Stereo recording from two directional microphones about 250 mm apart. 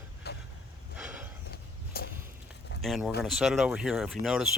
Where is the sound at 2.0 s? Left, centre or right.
Left.